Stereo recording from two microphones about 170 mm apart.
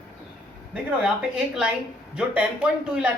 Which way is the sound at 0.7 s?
5° right (ahead or behind).